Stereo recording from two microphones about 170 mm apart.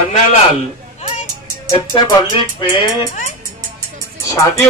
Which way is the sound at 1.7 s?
25° left (ahead or behind).